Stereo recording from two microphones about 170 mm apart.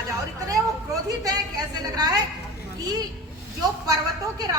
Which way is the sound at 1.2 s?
20° right (ahead or behind).